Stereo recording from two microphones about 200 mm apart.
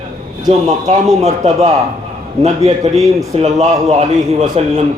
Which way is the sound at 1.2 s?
35° right (ahead or behind).